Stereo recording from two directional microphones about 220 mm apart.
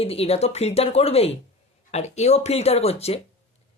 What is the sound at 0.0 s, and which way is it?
Speech, 25° left (ahead or behind).